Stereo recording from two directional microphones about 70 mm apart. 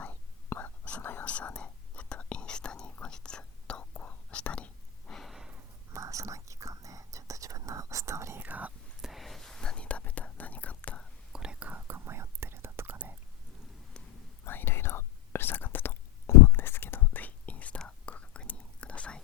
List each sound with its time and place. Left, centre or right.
0.6 s whispering: left
5.1 s a sound: centre
5.9 s whispering: right
8.4 s whispering: right
9.0 s whispering: centre; by 11.0 s left
11.3 s whispering: centre
11.6 s whispering: right
14.0 s a sound: centre
14.4 s whispering: left; by 19.2 s centre